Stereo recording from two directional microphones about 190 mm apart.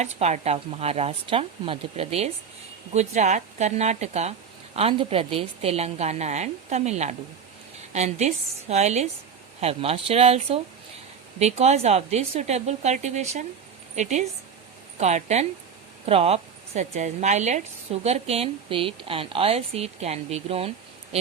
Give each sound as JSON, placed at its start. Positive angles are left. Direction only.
{"t": 0.0, "sound": "a woman's voice", "side_deg": -35}